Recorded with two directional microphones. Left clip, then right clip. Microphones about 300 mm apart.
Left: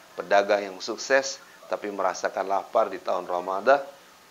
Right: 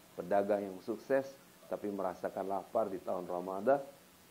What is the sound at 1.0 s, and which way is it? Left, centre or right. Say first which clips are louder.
A man's voice: left 11 dB; centre.